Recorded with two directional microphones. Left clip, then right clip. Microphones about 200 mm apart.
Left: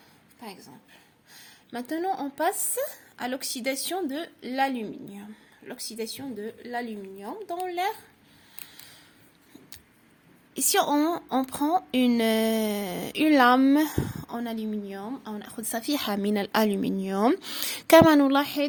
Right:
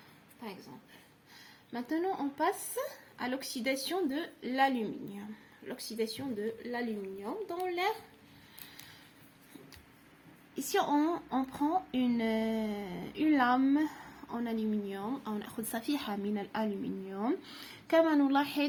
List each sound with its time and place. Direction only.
1.3 s a woman's voice: 45° left (ahead or behind)
10.5 s a woman's voice: 45° left (ahead or behind)